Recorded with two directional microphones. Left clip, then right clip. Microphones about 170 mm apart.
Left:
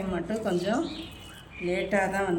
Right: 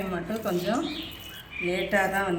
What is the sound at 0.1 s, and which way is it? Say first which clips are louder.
Speech: left 3 dB; 15° left (ahead or behind).